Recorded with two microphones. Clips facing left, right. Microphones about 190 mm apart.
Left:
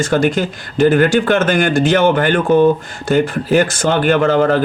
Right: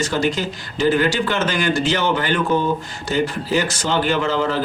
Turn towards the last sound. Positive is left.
turn(degrees=55)  # may be behind; listen again after turning